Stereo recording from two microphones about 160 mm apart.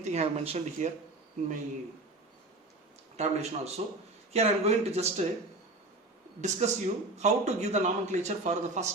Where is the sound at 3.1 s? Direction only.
45° right (ahead or behind).